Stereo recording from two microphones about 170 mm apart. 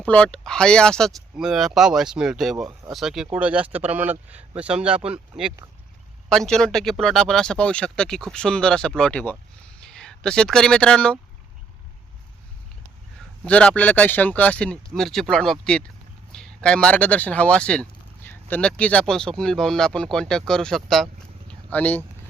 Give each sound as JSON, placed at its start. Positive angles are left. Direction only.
{"t": 0.0, "sound": "speech", "side_deg": 10}
{"t": 6.2, "sound": "speech", "side_deg": 5}
{"t": 13.4, "sound": "speech", "side_deg": 5}